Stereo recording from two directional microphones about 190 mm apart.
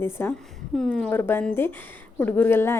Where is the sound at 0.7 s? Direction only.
Centre (ahead or behind).